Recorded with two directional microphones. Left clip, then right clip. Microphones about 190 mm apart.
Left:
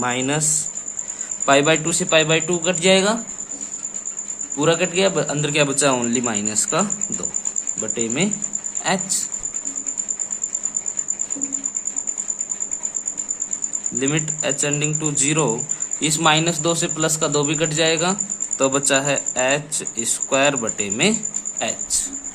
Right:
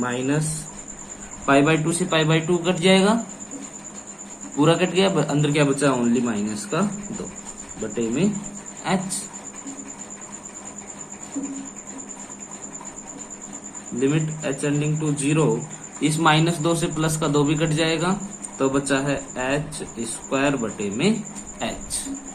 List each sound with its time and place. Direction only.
0.0 s speech: 50° left (ahead or behind)
1.5 s a man's voice: 40° left (ahead or behind)
4.5 s a man's voice: 25° left (ahead or behind); by 6.8 s 45° left (ahead or behind)
7.9 s speech: 45° left (ahead or behind)
14.0 s a man's voice: 45° left (ahead or behind)